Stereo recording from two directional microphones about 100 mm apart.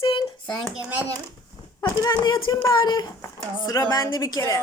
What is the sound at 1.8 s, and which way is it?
Speech, 45° left (ahead or behind).